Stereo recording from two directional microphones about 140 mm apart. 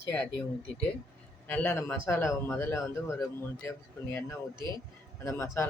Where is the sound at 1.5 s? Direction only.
10° left (ahead or behind).